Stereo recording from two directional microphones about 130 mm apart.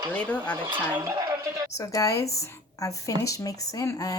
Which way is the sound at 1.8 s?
25° left (ahead or behind).